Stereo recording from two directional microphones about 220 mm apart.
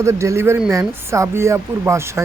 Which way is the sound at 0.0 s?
15° right (ahead or behind).